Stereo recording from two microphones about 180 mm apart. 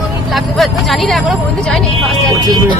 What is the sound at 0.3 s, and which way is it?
Speech, centre (ahead or behind).